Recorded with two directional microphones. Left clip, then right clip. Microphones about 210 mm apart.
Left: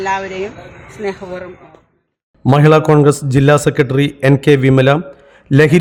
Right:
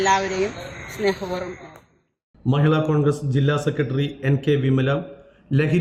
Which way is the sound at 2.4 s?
45° left (ahead or behind).